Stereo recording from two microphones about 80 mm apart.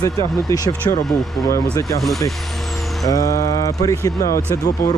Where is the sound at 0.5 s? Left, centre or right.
Left.